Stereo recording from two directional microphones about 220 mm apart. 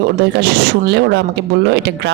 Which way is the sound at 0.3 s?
50° right (ahead or behind).